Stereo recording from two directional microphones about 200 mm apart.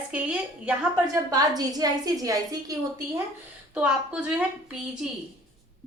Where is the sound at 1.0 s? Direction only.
20° right (ahead or behind).